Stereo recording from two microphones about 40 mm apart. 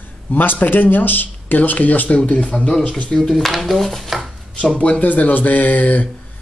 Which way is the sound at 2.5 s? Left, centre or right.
Centre.